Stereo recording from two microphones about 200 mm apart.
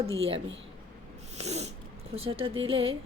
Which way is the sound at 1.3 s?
35° right (ahead or behind).